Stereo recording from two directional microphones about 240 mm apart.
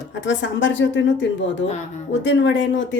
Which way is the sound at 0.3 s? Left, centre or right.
Left.